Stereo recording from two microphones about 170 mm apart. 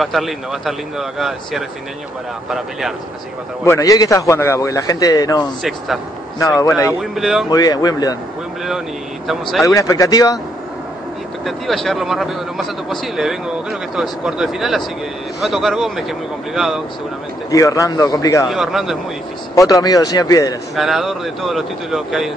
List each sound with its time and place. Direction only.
0.0 s speech: centre (ahead or behind)
3.6 s a man's voice: 20° left (ahead or behind)
5.6 s speech: centre (ahead or behind)
6.4 s a man's voice: 20° left (ahead or behind)
7.0 s speech: centre (ahead or behind)
7.4 s a man's voice: 25° left (ahead or behind)
9.3 s speech: centre (ahead or behind)
9.7 s a man's voice: 20° left (ahead or behind)
11.4 s speech: centre (ahead or behind)
17.5 s a man's voice: 20° left (ahead or behind)
18.5 s speech: centre (ahead or behind)
19.5 s a man's voice: 20° left (ahead or behind)
20.7 s speech: centre (ahead or behind)